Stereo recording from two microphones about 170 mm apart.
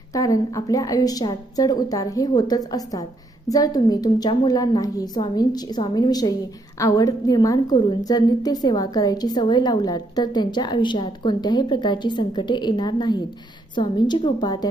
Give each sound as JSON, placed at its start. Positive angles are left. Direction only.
{"t": 0.1, "sound": "a woman's voice", "side_deg": 20}